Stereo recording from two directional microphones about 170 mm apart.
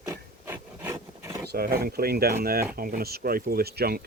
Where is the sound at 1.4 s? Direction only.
65° right (ahead or behind).